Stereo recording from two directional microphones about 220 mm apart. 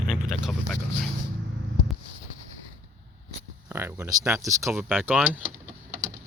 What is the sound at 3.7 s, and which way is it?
Speech, 10° right (ahead or behind).